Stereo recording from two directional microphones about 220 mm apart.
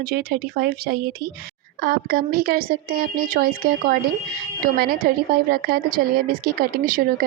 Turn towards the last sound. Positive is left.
turn(degrees=-40)  # may be behind; listen again after turning